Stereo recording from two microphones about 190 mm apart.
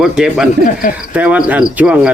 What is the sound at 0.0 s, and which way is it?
Speech, 5° right (ahead or behind).